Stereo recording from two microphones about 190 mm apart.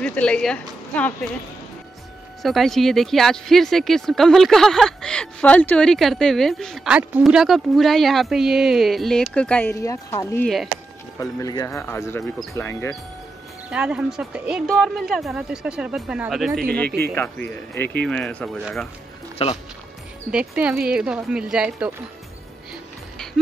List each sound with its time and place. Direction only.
0.0 s speech: 5° left (ahead or behind)
2.4 s speech: centre (ahead or behind); by 10.4 s 15° left (ahead or behind)
10.4 s speech: centre (ahead or behind)
11.1 s speech: 20° left (ahead or behind)
13.7 s speech: 5° right (ahead or behind)
17.0 s speech: 10° left (ahead or behind)
19.4 s speech: 30° left (ahead or behind)
20.2 s speech: 5° right (ahead or behind)